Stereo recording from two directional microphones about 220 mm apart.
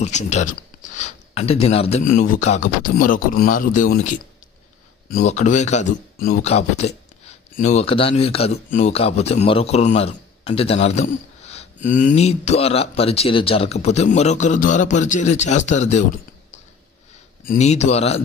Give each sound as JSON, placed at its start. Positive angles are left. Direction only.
{"t": 0.0, "sound": "speech", "side_deg": 30}
{"t": 6.4, "sound": "speech", "side_deg": 30}
{"t": 17.5, "sound": "speech", "side_deg": 30}